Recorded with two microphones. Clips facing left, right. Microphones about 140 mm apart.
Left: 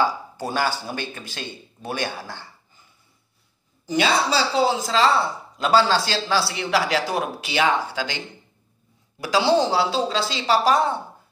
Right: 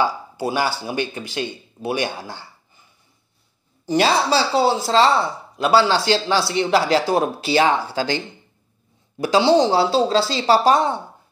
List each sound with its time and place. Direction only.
0.0 s speech: 10° right (ahead or behind)
3.8 s speech: 40° right (ahead or behind)
9.2 s speech: 25° right (ahead or behind)